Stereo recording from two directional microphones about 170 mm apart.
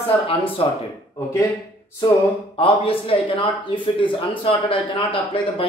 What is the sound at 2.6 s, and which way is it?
Speech, 30° left (ahead or behind).